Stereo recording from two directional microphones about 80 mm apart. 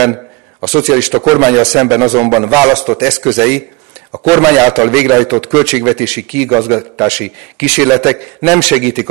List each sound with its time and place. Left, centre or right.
0.0 s a man's voice: centre
2.7 s speech: centre